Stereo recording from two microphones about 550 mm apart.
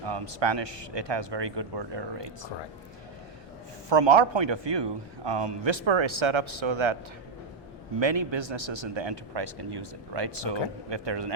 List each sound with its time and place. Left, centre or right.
0.0 s speech: right
3.8 s a man's voice: right
7.9 s speech: right